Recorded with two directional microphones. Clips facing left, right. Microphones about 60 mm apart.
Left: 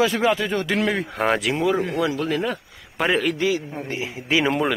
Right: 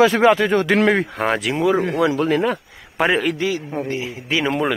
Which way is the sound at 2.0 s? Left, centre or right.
Right.